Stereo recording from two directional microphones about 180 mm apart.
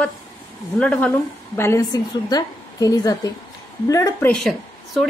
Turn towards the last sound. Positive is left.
turn(degrees=0)  # may be behind; listen again after turning